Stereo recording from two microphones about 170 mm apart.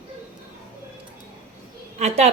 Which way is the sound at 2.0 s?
40° right (ahead or behind).